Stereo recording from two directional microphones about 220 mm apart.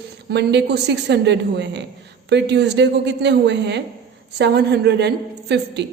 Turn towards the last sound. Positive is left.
turn(degrees=-50)  # may be behind; listen again after turning